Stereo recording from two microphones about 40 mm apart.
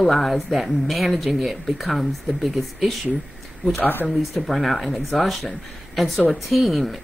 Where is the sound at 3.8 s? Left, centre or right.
Left.